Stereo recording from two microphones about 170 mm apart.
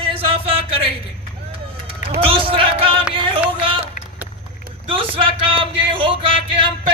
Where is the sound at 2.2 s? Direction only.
30° right (ahead or behind).